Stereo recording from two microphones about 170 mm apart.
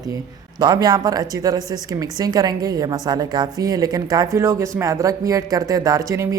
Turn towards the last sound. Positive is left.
turn(degrees=-15)  # may be behind; listen again after turning